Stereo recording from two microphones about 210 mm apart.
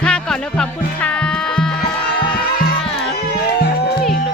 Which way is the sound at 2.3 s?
45° left (ahead or behind).